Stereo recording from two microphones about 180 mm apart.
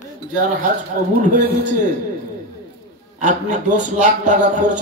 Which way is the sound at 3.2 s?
45° right (ahead or behind).